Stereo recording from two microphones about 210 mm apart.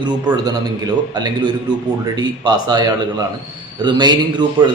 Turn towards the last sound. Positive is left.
turn(degrees=-20)  # may be behind; listen again after turning